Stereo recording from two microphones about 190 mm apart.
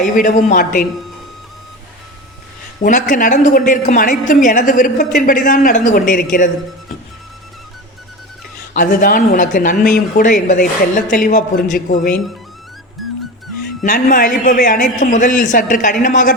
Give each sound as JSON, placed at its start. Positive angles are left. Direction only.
{"t": 0.0, "sound": "a woman's voice", "side_deg": 40}
{"t": 2.8, "sound": "a woman's voice", "side_deg": 45}
{"t": 8.7, "sound": "a woman's voice", "side_deg": 45}
{"t": 13.0, "sound": "music", "side_deg": 0}
{"t": 13.8, "sound": "a woman's voice", "side_deg": 45}